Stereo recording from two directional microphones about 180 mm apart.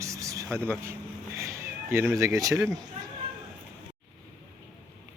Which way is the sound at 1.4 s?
15° right (ahead or behind).